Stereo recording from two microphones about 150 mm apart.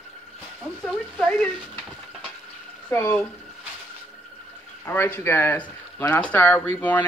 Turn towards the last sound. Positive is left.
turn(degrees=10)  # may be behind; listen again after turning